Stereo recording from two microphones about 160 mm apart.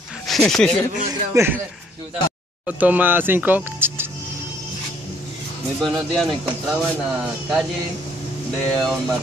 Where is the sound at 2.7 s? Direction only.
10° right (ahead or behind).